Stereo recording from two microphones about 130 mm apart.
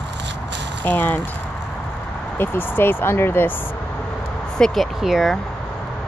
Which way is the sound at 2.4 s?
15° left (ahead or behind).